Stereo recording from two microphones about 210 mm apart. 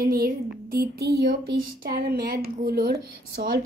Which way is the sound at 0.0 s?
45° right (ahead or behind).